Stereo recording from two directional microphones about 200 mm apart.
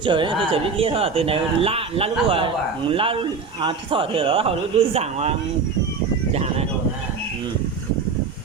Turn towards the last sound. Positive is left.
turn(degrees=-30)  # may be behind; listen again after turning